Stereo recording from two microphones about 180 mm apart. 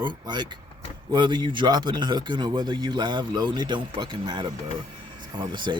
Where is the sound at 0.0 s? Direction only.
25° right (ahead or behind).